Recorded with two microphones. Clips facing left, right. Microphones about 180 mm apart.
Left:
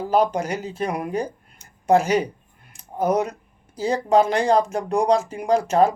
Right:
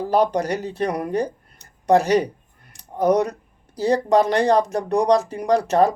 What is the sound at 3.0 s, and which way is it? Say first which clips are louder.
Speech: right 3 dB; 35° right (ahead or behind).